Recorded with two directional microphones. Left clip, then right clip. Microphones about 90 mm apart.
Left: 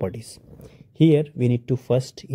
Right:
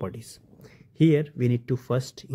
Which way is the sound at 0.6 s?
20° left (ahead or behind).